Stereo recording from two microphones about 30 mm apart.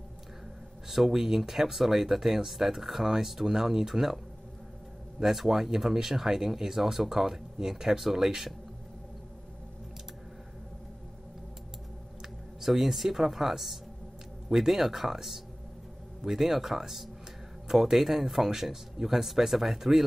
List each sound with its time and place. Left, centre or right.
0.8 s speech: centre
5.2 s speech: centre
12.5 s speech: centre